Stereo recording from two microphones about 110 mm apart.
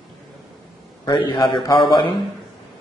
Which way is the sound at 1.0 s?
45° left (ahead or behind).